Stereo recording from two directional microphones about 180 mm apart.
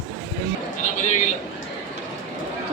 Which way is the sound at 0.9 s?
40° left (ahead or behind).